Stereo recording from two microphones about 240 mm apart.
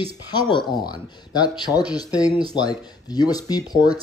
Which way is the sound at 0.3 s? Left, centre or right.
Centre.